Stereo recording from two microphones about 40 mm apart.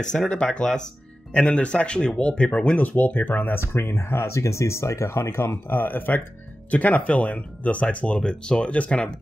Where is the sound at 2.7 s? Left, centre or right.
Left.